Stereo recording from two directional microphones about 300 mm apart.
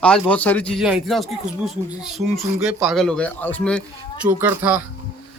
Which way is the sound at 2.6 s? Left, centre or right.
Centre.